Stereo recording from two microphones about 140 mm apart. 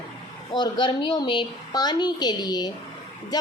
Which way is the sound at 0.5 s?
35° left (ahead or behind).